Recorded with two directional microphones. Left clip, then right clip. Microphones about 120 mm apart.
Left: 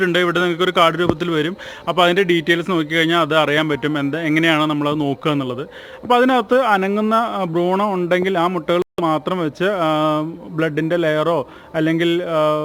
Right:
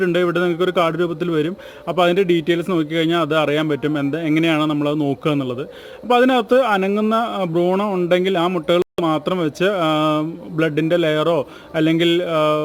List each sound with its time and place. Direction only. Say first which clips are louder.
0.0 s speech: left 1 dB; centre (ahead or behind)